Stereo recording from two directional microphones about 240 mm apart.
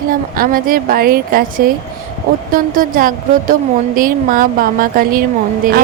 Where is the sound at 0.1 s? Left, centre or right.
Right.